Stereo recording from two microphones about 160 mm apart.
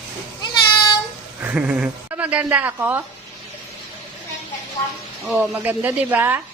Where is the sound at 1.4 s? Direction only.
10° right (ahead or behind).